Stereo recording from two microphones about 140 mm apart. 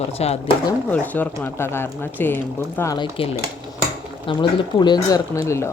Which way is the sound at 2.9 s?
35° left (ahead or behind).